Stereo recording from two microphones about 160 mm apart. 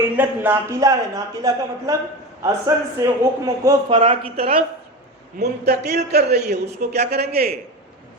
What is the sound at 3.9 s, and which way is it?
Speech, 35° right (ahead or behind).